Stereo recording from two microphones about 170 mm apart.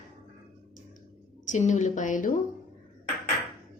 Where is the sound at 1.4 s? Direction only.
45° left (ahead or behind).